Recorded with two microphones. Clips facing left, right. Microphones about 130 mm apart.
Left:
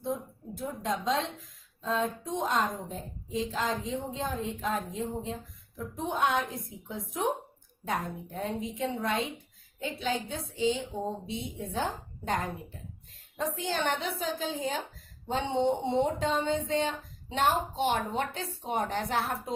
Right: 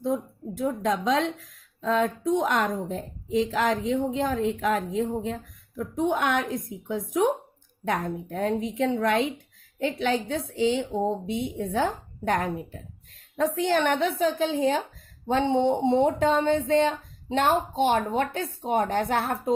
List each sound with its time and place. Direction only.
0.1 s a woman's voice: 85° right
9.8 s a woman's voice: 70° right (ahead or behind); by 10.8 s 90° right
11.3 s a woman's voice: 65° right (ahead or behind)
15.3 s speech: 65° right (ahead or behind)